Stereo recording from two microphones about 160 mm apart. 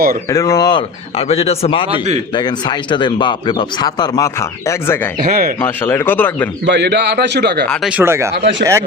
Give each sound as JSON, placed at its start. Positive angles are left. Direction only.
{"t": 0.3, "sound": "speech", "side_deg": 20}
{"t": 1.9, "sound": "a man's voice", "side_deg": -45}
{"t": 2.3, "sound": "speech", "side_deg": 25}
{"t": 5.2, "sound": "speech", "side_deg": -65}
{"t": 5.5, "sound": "speech", "side_deg": 15}
{"t": 6.7, "sound": "a man's voice", "side_deg": -90}
{"t": 7.7, "sound": "speech", "side_deg": -5}
{"t": 8.3, "sound": "a man's voice", "side_deg": -90}